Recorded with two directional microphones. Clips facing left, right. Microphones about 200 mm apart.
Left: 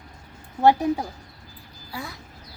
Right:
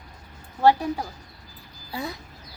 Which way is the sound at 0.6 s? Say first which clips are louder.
Left 1 dB; 20° left (ahead or behind).